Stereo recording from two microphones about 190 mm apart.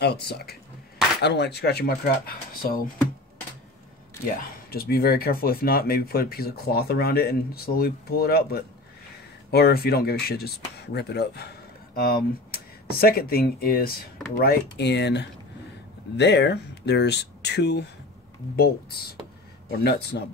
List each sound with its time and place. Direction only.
0.0 s speech: 60° left (ahead or behind)
4.6 s speech: 55° left (ahead or behind)
19.8 s speech: 60° left (ahead or behind)